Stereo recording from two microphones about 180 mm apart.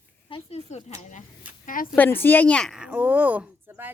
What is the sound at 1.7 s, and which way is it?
Speech, 50° left (ahead or behind).